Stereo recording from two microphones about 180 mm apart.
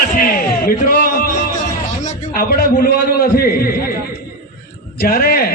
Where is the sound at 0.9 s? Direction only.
55° left (ahead or behind).